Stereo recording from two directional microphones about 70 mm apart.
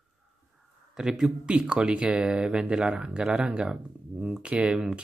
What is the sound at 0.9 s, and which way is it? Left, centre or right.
Speech, centre.